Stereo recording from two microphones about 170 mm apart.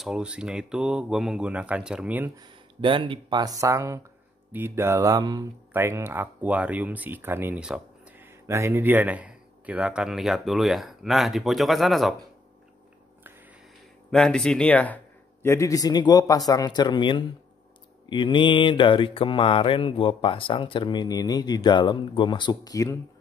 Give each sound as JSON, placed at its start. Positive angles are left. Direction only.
{"t": 0.0, "sound": "speech", "side_deg": -5}
{"t": 2.3, "sound": "speech", "side_deg": -25}
{"t": 14.1, "sound": "speech", "side_deg": 5}
{"t": 15.4, "sound": "mantra", "side_deg": 15}